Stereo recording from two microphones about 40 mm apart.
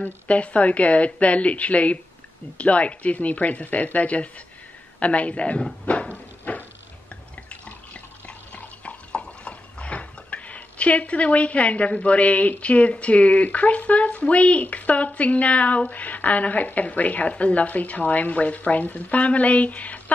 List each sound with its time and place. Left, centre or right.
0.3 s speech: left
5.9 s cupboard open or close: left
7.6 s water: left
14.6 s speech: left